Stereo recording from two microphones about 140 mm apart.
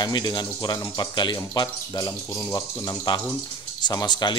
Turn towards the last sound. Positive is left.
turn(degrees=30)  # may be behind; listen again after turning